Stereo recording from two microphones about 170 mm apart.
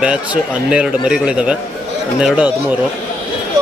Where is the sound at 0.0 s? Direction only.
5° right (ahead or behind).